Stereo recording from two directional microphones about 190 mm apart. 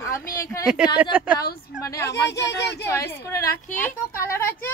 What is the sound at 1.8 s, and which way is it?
A woman's voice, 15° left (ahead or behind).